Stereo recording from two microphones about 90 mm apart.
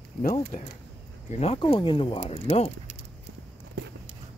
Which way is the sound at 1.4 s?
90° left.